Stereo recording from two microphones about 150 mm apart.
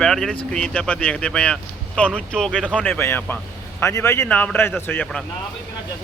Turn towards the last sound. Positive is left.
turn(degrees=10)  # may be behind; listen again after turning